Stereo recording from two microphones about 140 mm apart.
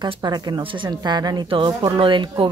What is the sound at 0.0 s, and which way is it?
Speech, 30° right (ahead or behind).